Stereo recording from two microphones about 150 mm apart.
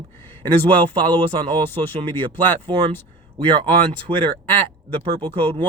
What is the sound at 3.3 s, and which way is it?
A man's voice, 35° right (ahead or behind).